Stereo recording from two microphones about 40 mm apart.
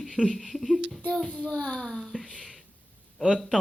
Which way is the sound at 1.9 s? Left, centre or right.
Centre.